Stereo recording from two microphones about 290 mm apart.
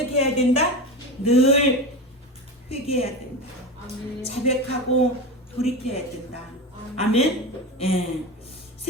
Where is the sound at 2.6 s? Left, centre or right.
Left.